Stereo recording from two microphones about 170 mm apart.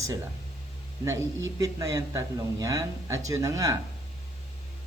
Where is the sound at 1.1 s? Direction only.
15° right (ahead or behind).